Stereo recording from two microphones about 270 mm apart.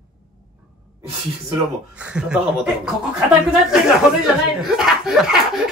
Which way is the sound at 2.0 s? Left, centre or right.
Centre.